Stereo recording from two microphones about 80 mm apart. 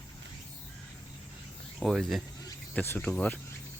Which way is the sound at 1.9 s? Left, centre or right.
Centre.